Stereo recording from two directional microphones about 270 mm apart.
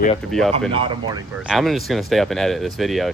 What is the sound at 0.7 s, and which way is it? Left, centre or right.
Speech, centre.